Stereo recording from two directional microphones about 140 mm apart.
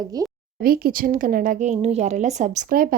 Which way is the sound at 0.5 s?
90° right.